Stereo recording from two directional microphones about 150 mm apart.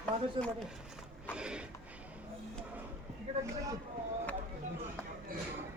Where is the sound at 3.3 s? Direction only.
40° right (ahead or behind).